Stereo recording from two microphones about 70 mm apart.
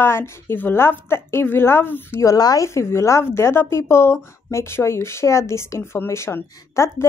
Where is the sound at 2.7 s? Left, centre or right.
Left.